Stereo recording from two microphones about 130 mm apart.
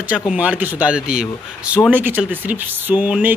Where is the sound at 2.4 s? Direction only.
15° right (ahead or behind).